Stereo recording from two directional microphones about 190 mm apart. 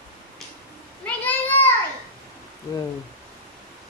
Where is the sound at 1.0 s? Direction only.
10° left (ahead or behind).